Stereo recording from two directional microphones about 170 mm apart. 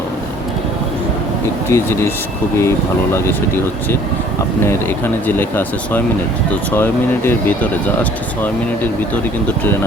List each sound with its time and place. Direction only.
1.7 s speech: 15° left (ahead or behind)
4.6 s speech: 15° left (ahead or behind)